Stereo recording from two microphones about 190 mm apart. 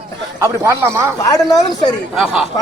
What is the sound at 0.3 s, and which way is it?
Speech, 15° right (ahead or behind).